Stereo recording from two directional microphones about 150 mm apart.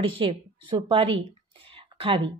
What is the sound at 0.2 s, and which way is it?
A woman's voice, 35° right (ahead or behind).